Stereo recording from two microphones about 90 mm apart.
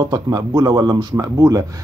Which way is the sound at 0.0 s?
40° right (ahead or behind).